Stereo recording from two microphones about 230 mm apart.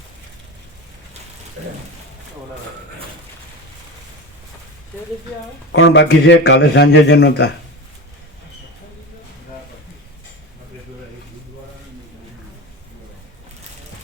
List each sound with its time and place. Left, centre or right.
5.7 s a man's voice: left